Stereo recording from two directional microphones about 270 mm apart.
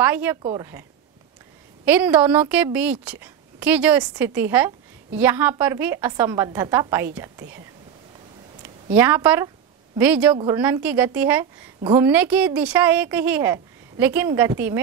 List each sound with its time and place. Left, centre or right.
0.0 s a woman's voice: centre
0.4 s a woman's voice: centre
1.9 s a woman's voice: centre
8.9 s a woman's voice: centre